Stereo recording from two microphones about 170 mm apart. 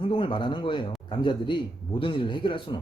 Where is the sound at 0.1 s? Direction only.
30° left (ahead or behind).